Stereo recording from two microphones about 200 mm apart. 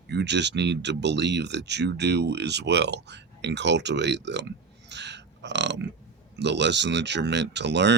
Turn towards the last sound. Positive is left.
turn(degrees=-60)  # may be behind; listen again after turning